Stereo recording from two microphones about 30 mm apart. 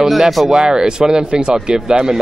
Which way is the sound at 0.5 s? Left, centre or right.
Right.